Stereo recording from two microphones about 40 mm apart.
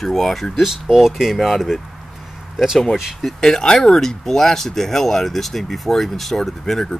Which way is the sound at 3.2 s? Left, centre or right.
Centre.